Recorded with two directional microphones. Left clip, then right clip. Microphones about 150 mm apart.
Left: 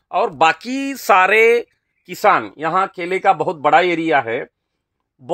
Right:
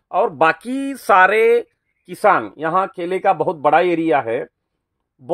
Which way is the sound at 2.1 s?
20° left (ahead or behind).